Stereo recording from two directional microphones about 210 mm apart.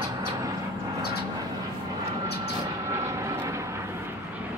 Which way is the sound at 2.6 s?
15° right (ahead or behind).